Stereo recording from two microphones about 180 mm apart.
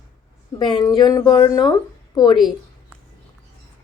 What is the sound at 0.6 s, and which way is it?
A woman's voice, 25° left (ahead or behind).